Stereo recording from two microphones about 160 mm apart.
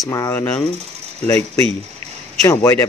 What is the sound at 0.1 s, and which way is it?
Speech, 20° left (ahead or behind).